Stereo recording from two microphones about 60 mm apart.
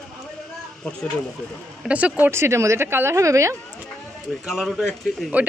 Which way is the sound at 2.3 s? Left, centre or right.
Right.